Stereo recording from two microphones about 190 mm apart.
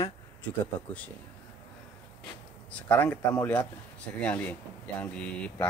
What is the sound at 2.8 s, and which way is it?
Speech, 10° left (ahead or behind).